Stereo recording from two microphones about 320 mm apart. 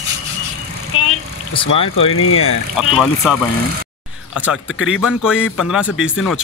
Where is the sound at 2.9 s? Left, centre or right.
Centre.